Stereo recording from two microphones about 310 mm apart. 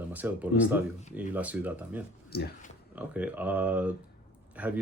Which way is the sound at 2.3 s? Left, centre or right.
Left.